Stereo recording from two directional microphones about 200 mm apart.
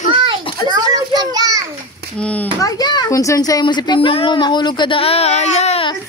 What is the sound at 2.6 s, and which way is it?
A woman's voice, 20° left (ahead or behind).